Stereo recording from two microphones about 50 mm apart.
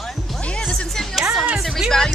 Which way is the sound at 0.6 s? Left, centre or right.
Centre.